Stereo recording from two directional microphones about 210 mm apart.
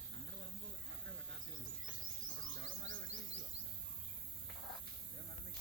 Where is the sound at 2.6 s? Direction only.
65° right (ahead or behind).